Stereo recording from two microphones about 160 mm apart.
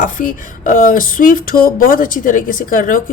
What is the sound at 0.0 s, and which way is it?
Speech, 55° left (ahead or behind).